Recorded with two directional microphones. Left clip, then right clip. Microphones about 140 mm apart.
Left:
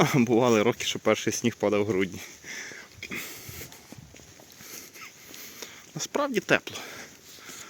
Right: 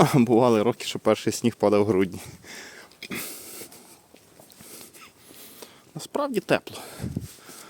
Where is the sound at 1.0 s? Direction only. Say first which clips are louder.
Right 2 dB; 35° right (ahead or behind).